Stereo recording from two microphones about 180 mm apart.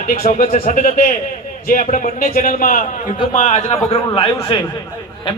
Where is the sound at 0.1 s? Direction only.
45° left (ahead or behind).